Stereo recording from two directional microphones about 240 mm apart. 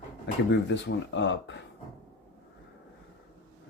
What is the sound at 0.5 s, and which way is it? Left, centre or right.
Speech, left.